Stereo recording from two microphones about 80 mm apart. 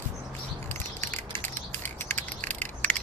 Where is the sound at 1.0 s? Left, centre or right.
Left.